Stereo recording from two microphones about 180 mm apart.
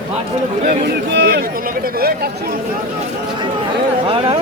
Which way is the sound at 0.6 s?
70° right (ahead or behind).